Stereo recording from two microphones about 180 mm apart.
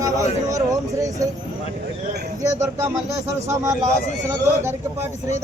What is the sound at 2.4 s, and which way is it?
Speech, 15° right (ahead or behind).